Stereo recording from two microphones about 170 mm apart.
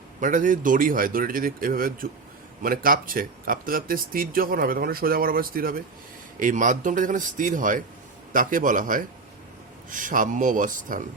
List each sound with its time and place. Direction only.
0.2 s a man's voice: 50° right (ahead or behind)